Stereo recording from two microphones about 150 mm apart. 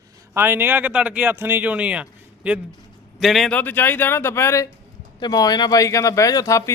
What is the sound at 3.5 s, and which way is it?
Speech, 10° left (ahead or behind).